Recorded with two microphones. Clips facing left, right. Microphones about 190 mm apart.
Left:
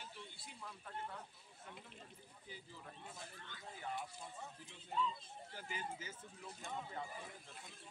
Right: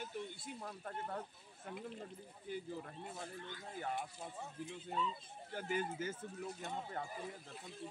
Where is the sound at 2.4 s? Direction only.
55° right (ahead or behind).